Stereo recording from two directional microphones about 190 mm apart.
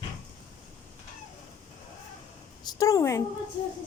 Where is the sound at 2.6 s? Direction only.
20° left (ahead or behind).